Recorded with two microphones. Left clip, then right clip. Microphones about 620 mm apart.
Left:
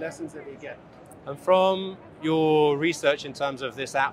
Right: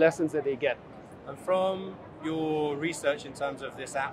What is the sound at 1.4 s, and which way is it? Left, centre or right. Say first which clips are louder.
Speech: left 7 dB; left.